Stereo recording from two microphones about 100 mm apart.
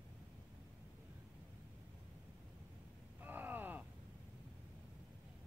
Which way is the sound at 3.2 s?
20° right (ahead or behind).